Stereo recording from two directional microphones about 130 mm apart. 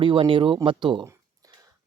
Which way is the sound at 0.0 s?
40° right (ahead or behind).